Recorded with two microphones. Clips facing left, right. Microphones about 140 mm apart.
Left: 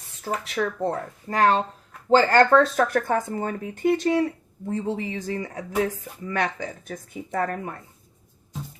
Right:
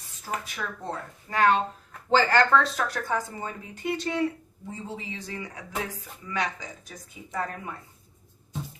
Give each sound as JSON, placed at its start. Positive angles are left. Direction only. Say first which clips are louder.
{"t": 0.4, "sound": "speech", "louder": "left 10 dB", "side_deg": 75}
{"t": 1.3, "sound": "speech", "louder": "left 2 dB", "side_deg": 40}
{"t": 4.7, "sound": "speech", "louder": "left 10 dB", "side_deg": 60}
{"t": 6.2, "sound": "speech", "louder": "left 5 dB", "side_deg": 55}